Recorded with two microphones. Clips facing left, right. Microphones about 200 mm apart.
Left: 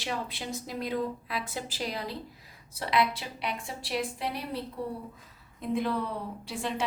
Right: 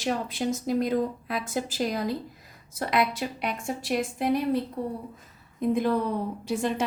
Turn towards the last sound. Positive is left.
turn(degrees=-45)  # may be behind; listen again after turning